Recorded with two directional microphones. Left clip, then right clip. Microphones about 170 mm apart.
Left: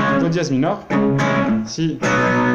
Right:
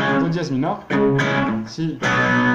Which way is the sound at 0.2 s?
5° left (ahead or behind).